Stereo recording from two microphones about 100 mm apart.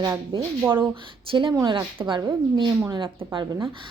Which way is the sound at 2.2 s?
40° right (ahead or behind).